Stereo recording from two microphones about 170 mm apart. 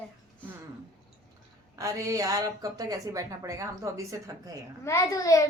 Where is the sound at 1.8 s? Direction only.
20° right (ahead or behind).